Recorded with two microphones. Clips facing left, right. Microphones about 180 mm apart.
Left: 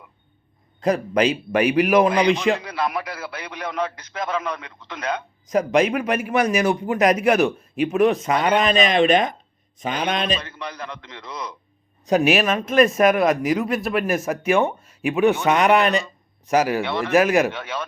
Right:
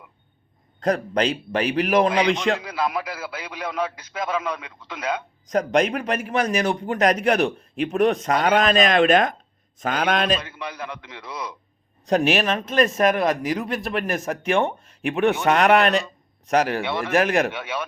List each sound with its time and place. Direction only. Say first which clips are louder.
0.9 s a man's voice: left 2 dB; 5° left (ahead or behind)
5.5 s a man's voice: left 2 dB; 5° left (ahead or behind)
12.0 s a man's voice: left 2 dB; 5° left (ahead or behind)
17.5 s speech: even; 10° right (ahead or behind)